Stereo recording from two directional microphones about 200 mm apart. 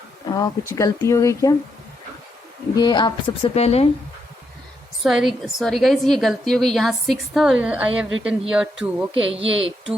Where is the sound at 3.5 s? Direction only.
30° left (ahead or behind).